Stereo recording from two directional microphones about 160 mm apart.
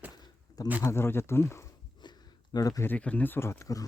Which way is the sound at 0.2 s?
25° left (ahead or behind).